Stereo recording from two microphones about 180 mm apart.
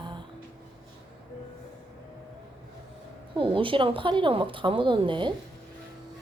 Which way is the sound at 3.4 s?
30° right (ahead or behind).